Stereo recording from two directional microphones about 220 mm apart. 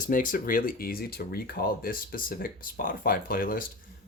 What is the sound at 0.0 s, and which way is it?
Speech, 40° left (ahead or behind).